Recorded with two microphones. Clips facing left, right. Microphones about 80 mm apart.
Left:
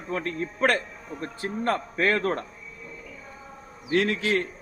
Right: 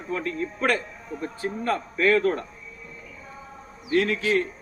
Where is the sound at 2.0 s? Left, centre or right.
Left.